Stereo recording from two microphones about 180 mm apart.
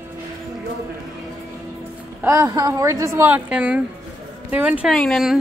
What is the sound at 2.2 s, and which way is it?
A woman's voice, 15° right (ahead or behind).